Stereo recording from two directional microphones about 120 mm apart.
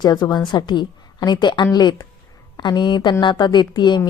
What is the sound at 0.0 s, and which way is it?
A woman's voice, 35° left (ahead or behind).